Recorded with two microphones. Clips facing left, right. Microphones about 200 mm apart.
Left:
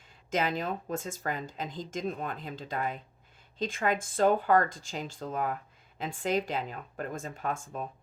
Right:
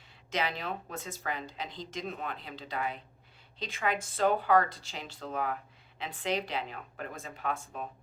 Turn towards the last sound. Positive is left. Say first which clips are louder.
# left 2 dB
turn(degrees=50)  # may be behind; listen again after turning